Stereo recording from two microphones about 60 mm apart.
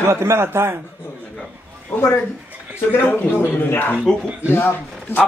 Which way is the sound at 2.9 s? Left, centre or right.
Left.